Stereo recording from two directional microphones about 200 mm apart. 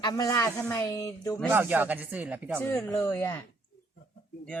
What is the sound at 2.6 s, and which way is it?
Speech, 10° left (ahead or behind).